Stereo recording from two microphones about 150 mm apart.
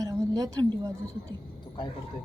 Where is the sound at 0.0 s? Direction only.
25° right (ahead or behind).